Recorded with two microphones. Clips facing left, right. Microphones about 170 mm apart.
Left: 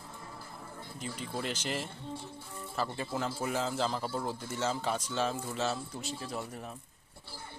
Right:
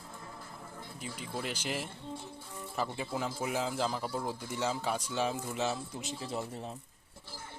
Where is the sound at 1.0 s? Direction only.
5° right (ahead or behind); by 6.7 s 25° right (ahead or behind).